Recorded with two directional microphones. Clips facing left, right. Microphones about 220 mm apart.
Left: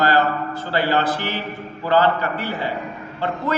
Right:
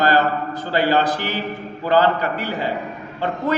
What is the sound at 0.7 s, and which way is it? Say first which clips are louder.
A man's voice: right 2 dB; 15° right (ahead or behind).